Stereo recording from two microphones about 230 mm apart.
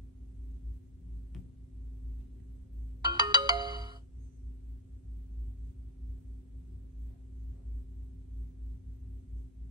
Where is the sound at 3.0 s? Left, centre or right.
Centre.